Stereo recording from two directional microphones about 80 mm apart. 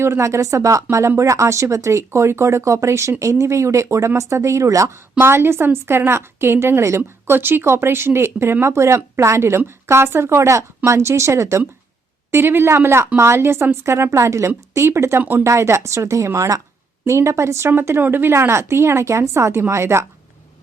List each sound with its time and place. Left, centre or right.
0.0 s speech: right
15.2 s speech: right
15.4 s speech: right